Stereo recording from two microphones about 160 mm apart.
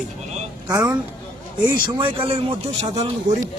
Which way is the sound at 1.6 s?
35° right (ahead or behind).